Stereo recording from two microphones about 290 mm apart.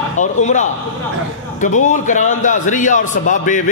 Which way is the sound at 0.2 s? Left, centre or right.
Left.